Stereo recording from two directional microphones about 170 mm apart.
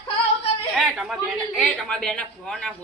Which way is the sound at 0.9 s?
Centre (ahead or behind).